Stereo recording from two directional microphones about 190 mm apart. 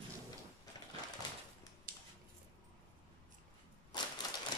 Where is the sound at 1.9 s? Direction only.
50° right (ahead or behind).